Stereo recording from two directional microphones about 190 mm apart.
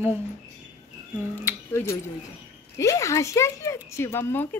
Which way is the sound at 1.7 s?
15° left (ahead or behind).